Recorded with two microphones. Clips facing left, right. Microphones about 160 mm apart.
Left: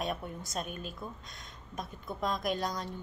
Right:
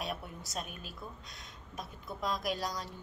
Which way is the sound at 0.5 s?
5° right (ahead or behind).